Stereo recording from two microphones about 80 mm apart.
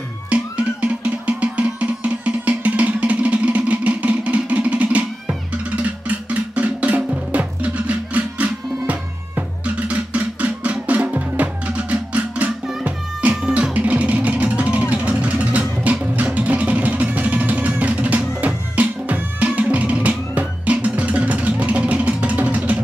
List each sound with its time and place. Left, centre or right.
0.3 s music: centre
6.5 s music: centre